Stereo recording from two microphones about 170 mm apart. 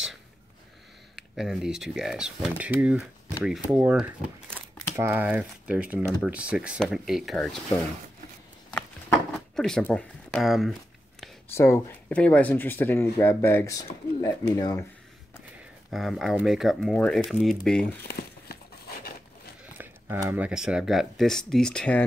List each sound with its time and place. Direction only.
1.1 s speech: centre (ahead or behind)
9.6 s speech: 5° left (ahead or behind)
11.5 s speech: 15° left (ahead or behind)
15.9 s speech: centre (ahead or behind)
18.0 s a sound: 65° left (ahead or behind)
19.8 s speech: 15° right (ahead or behind); by 22.0 s 5° left (ahead or behind)